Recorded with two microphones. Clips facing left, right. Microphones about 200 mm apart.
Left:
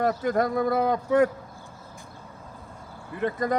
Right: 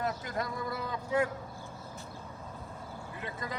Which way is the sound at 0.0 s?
60° left (ahead or behind).